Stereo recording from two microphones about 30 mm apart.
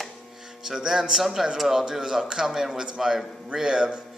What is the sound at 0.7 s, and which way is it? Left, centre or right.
Speech, centre.